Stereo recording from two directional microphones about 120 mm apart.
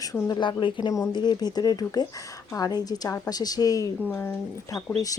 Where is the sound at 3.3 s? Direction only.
30° left (ahead or behind).